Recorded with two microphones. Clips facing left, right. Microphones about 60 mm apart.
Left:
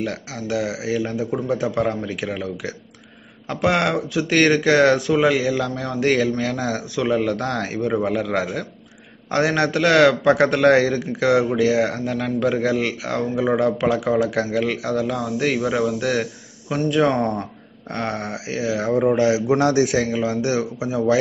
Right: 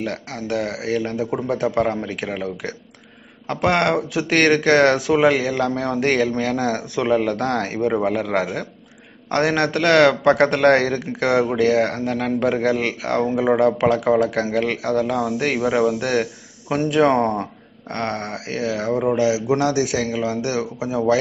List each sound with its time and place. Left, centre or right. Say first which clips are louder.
0.0 s a man's voice: even; centre
9.3 s speech: even; centre
15.0 s a man's voice: right 1 dB; centre
16.0 s a man's voice: right 1 dB; centre
17.8 s speech: right 1 dB; centre
19.1 s a man's voice: left 1 dB; left; by 21.0 s centre